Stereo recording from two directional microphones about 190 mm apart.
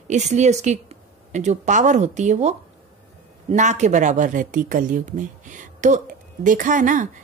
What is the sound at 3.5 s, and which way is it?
Speech, 40° right (ahead or behind).